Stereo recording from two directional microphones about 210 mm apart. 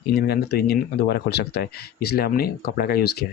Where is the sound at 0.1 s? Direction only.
50° left (ahead or behind).